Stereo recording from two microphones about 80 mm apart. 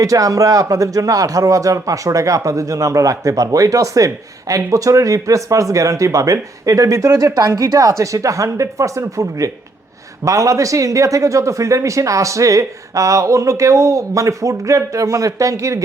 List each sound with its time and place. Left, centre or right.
0.0 s speech: right